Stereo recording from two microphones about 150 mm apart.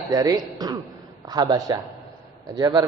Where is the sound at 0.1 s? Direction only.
25° right (ahead or behind).